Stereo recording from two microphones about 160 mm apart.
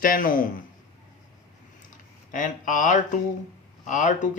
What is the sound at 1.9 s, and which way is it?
Speech, 55° left (ahead or behind).